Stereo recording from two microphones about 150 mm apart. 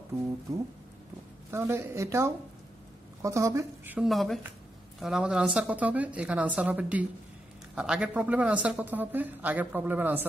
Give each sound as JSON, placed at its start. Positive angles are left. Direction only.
{"t": 1.5, "sound": "a man's voice", "side_deg": -15}
{"t": 4.1, "sound": "a man's voice", "side_deg": 0}